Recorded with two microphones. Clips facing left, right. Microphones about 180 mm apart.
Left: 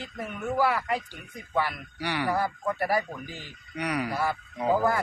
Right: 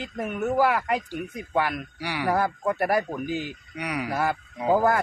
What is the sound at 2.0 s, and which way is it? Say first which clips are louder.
Speech: left 1 dB; 10° right (ahead or behind).